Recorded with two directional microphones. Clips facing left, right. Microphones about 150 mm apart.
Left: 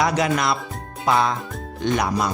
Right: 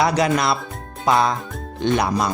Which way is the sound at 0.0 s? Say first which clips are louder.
Right 2 dB; 35° right (ahead or behind).